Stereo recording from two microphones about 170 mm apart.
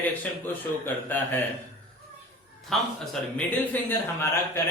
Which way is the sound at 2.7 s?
Centre (ahead or behind).